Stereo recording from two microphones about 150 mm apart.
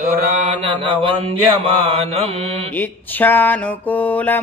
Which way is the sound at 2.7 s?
10° left (ahead or behind).